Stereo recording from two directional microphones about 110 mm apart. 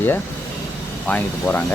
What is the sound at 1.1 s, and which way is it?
Speech, 15° left (ahead or behind).